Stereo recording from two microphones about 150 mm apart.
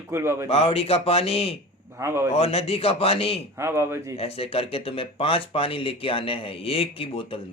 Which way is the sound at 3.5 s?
20° right (ahead or behind).